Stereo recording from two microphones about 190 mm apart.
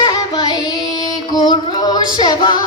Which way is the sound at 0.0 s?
20° left (ahead or behind).